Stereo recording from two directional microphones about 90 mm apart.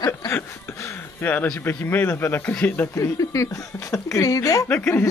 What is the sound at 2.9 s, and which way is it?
Speech, 35° left (ahead or behind).